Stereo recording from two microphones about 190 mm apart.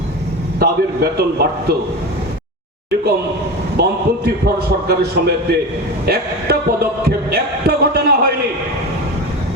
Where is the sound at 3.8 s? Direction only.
55° right (ahead or behind).